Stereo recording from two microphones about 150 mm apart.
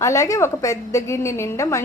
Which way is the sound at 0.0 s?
20° left (ahead or behind).